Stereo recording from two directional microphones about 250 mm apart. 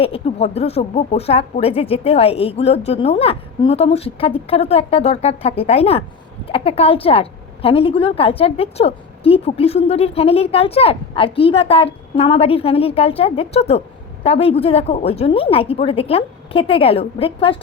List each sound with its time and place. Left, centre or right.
0.0 s a woman's voice: left